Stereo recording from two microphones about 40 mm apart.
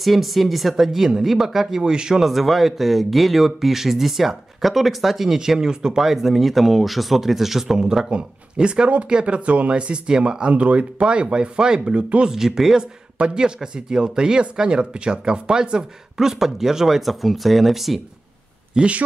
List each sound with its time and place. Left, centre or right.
0.0 s speech: centre
2.2 s speech: centre
8.1 s speech: right
10.5 s speech: right
11.0 s speech: right
12.3 s speech: centre
13.2 s speech: right
16.3 s speech: centre
18.8 s speech: centre